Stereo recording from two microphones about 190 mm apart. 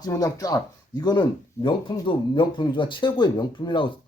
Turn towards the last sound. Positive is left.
turn(degrees=25)  # may be behind; listen again after turning